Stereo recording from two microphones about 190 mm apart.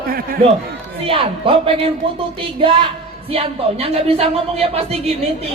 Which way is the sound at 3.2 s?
30° right (ahead or behind).